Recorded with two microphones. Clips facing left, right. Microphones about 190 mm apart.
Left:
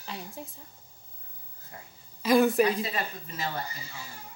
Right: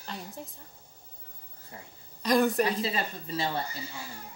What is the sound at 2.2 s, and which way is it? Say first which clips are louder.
Speech: left 3 dB; centre (ahead or behind).